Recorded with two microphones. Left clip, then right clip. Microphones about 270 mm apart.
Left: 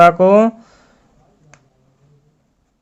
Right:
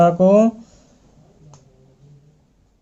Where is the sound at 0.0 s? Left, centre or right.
Centre.